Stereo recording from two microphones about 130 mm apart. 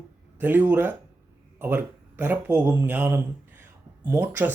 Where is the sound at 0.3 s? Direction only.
15° right (ahead or behind).